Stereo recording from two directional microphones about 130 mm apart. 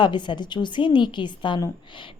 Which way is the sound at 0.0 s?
35° left (ahead or behind).